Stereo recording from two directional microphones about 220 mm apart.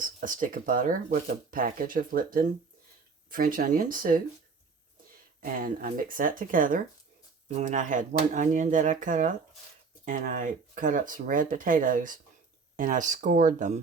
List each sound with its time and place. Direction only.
0.0 s speech: 35° right (ahead or behind)
5.4 s speech: 40° right (ahead or behind)